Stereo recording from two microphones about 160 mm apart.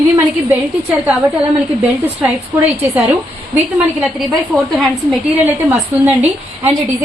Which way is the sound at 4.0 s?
Centre (ahead or behind).